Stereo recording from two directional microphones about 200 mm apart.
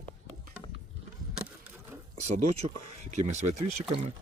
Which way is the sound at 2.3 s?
35° right (ahead or behind).